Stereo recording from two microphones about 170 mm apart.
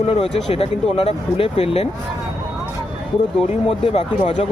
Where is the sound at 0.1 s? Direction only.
35° left (ahead or behind).